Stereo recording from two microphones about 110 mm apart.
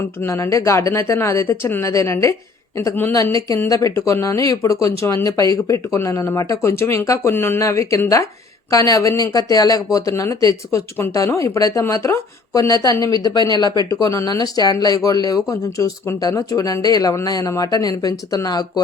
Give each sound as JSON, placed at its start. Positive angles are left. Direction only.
{"t": 0.2, "sound": "speech", "side_deg": 25}